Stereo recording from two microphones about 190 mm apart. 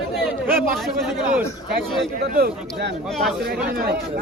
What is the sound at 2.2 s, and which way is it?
A man's voice, 55° right (ahead or behind).